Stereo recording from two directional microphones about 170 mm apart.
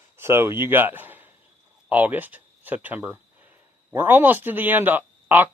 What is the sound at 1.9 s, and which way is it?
Speech, 10° right (ahead or behind).